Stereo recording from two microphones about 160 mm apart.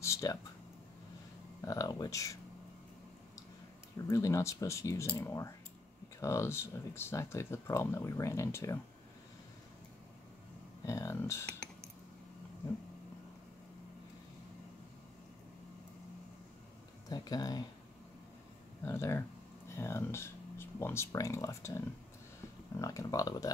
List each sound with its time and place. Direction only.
0.0 s a sound: 20° left (ahead or behind)
1.6 s speech: 20° left (ahead or behind)
4.1 s speech: 20° left (ahead or behind)
10.9 s speech: 20° left (ahead or behind)
17.1 s speech: 25° left (ahead or behind)
18.9 s speech: 15° left (ahead or behind)